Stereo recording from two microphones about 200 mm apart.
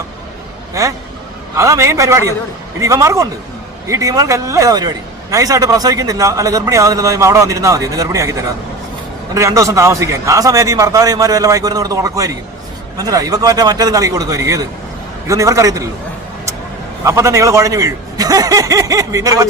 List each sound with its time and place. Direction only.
0.7 s a man's voice: 15° right (ahead or behind)
17.0 s speech: 15° right (ahead or behind)